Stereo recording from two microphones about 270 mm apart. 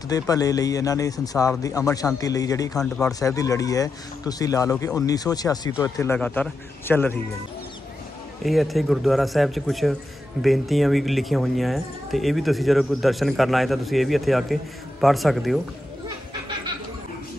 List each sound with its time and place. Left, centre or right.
0.1 s speech: centre
8.5 s speech: centre